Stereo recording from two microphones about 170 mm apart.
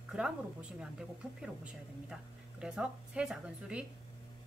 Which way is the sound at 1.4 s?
5° right (ahead or behind).